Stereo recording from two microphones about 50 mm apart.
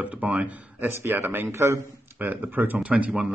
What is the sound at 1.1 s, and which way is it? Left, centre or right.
Speech, right.